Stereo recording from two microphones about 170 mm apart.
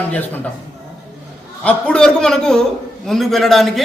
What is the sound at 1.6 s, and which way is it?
A man's voice, 5° left (ahead or behind).